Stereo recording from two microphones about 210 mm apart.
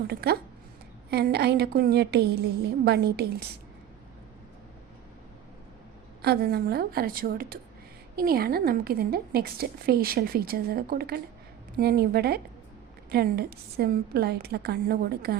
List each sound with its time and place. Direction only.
0.1 s a woman's voice: 50° right (ahead or behind)
6.2 s a woman's voice: 50° right (ahead or behind)